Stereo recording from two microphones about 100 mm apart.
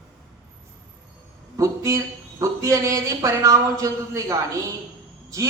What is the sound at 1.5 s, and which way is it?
A man's voice, 30° right (ahead or behind).